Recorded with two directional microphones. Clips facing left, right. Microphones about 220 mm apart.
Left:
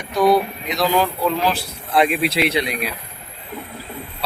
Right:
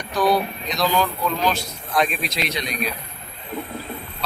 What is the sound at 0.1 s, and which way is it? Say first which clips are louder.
Speech: left 4 dB; 25° left (ahead or behind).